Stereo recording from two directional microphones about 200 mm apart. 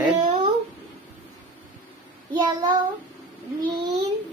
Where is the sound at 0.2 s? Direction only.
30° right (ahead or behind).